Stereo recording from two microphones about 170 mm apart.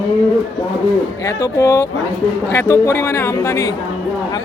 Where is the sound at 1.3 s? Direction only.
20° left (ahead or behind).